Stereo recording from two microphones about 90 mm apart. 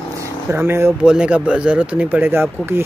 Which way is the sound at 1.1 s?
10° right (ahead or behind).